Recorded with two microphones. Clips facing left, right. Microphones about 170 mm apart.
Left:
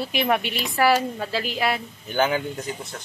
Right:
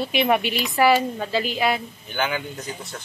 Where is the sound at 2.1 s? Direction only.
40° left (ahead or behind).